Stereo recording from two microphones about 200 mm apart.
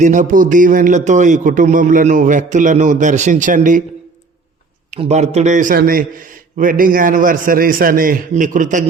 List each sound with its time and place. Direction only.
0.0 s a man's voice: 40° right (ahead or behind)
4.9 s a man's voice: 35° right (ahead or behind)